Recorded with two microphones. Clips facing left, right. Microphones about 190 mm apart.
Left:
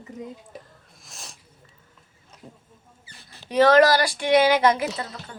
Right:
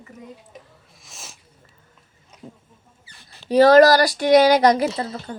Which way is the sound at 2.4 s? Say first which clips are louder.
Right 5 dB; centre (ahead or behind).